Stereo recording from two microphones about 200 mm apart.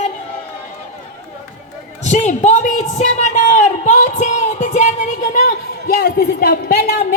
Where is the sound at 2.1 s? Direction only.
35° left (ahead or behind).